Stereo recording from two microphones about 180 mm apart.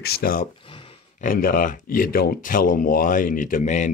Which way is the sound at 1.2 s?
50° left (ahead or behind).